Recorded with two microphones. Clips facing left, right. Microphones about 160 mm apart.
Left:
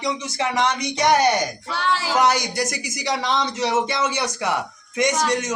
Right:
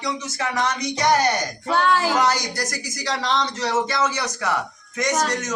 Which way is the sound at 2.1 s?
10° left (ahead or behind).